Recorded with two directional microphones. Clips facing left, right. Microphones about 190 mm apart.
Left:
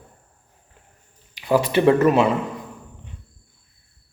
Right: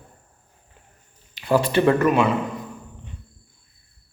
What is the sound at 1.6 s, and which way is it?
Speech, 20° left (ahead or behind).